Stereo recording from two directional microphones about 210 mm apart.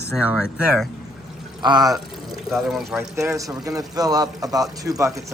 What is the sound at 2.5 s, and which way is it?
Speech, centre (ahead or behind).